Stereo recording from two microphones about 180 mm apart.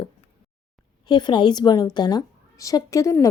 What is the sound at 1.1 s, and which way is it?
A woman's voice, 25° left (ahead or behind).